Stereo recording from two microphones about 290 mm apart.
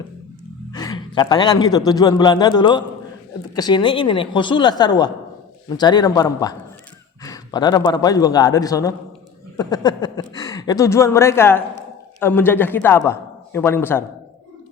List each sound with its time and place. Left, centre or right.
0.7 s a man's voice: centre